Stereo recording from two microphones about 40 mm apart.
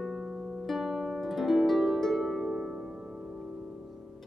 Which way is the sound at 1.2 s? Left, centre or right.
Centre.